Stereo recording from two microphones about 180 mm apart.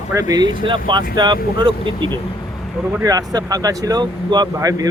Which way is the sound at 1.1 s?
25° right (ahead or behind).